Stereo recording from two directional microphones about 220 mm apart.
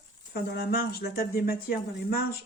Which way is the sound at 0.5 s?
45° left (ahead or behind).